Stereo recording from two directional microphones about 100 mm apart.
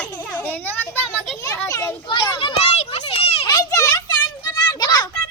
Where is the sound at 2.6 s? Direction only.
90° left.